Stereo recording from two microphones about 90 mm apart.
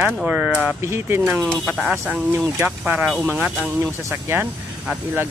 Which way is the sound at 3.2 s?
15° right (ahead or behind).